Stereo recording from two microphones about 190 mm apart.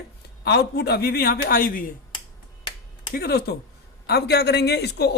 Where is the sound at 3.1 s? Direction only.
55° left (ahead or behind).